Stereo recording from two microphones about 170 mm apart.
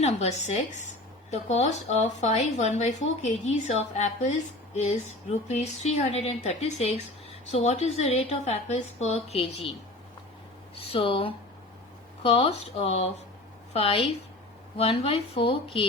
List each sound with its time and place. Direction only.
0.0 s speech: 40° left (ahead or behind)
10.8 s speech: 35° left (ahead or behind)